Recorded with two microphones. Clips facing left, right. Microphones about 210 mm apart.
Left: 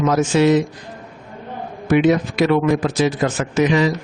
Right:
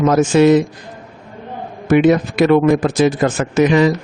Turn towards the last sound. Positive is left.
turn(degrees=-55)  # may be behind; listen again after turning